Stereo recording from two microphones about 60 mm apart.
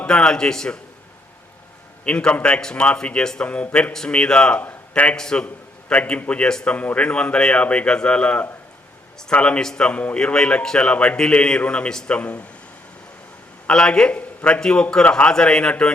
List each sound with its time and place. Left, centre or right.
0.1 s a man's voice: centre
2.0 s a man's voice: centre
4.6 s a sound: left
5.1 s a man's voice: centre
5.9 s a man's voice: left
6.7 s a man's voice: left
13.7 s a man's voice: centre